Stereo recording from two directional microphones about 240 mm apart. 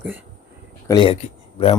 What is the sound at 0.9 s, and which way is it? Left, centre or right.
Speech, left.